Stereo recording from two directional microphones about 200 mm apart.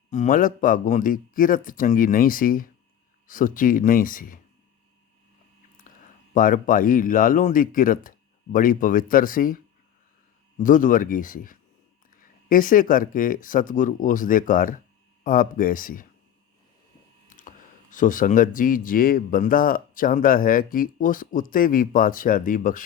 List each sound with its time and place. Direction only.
0.1 s a man's voice: 40° left (ahead or behind)
5.9 s a sound: 40° left (ahead or behind)
6.3 s a man's voice: 40° left (ahead or behind)
10.6 s a man's voice: 40° left (ahead or behind)
17.2 s a sound: 40° left (ahead or behind)
17.9 s a man's voice: 40° left (ahead or behind)